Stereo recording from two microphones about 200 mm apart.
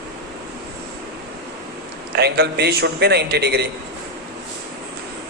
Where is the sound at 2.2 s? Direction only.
55° right (ahead or behind).